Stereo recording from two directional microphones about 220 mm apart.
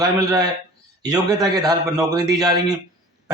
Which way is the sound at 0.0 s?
15° right (ahead or behind).